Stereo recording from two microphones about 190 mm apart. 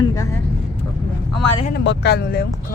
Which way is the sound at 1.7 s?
60° left (ahead or behind).